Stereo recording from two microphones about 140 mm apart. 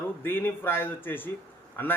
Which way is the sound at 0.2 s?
15° left (ahead or behind).